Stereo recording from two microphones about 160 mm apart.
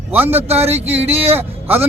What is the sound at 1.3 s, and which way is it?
Speech, 10° right (ahead or behind).